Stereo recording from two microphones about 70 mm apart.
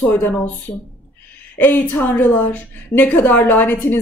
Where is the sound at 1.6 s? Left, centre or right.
Left.